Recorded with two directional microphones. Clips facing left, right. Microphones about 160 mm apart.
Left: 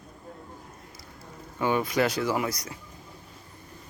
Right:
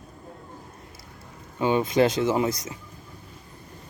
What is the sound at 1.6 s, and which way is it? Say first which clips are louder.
Speech: right 4 dB; 20° right (ahead or behind).